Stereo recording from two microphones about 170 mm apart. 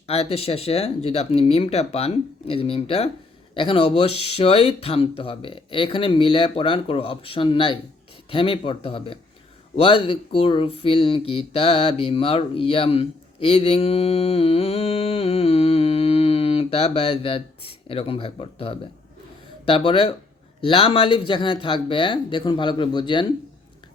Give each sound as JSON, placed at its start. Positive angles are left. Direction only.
{"t": 0.1, "sound": "speech", "side_deg": 35}